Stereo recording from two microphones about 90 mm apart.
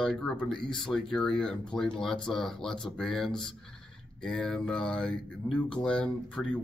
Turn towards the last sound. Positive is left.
turn(degrees=10)  # may be behind; listen again after turning